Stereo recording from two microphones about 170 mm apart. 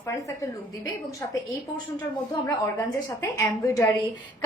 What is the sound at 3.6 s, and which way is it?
Speech, 20° left (ahead or behind).